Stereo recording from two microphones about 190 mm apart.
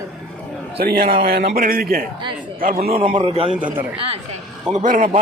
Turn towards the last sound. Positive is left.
turn(degrees=-45)  # may be behind; listen again after turning